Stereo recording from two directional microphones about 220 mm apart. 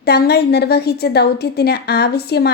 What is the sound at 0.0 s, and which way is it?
A woman's voice, 45° left (ahead or behind).